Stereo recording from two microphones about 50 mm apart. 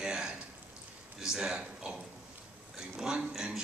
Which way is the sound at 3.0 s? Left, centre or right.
Centre.